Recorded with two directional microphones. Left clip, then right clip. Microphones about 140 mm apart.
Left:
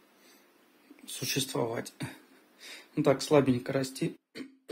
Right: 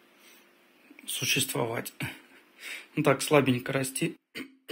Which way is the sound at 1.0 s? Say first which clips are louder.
Right 5 dB; 15° left (ahead or behind).